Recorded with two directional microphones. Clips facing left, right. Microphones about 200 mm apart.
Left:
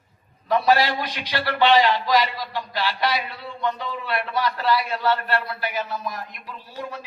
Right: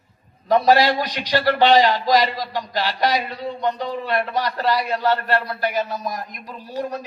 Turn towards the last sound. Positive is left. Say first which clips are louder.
# right 7 dB
turn(degrees=-40)  # may be behind; listen again after turning